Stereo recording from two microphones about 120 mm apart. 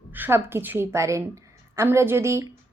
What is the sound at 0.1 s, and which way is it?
A woman's voice, 15° right (ahead or behind).